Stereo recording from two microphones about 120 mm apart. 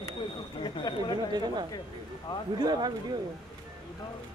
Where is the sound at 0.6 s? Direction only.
40° left (ahead or behind).